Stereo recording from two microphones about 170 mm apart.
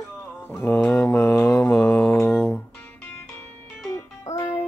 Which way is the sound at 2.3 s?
5° left (ahead or behind).